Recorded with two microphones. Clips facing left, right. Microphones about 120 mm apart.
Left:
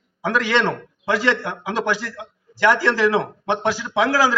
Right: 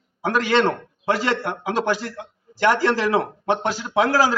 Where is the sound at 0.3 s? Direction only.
40° right (ahead or behind).